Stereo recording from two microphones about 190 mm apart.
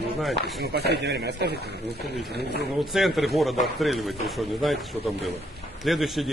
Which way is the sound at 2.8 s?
Centre (ahead or behind).